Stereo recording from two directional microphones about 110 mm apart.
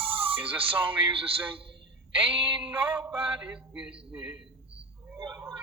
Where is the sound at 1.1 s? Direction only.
55° right (ahead or behind).